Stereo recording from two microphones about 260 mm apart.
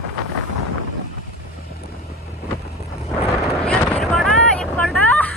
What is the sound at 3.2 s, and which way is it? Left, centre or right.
Vehicle, centre.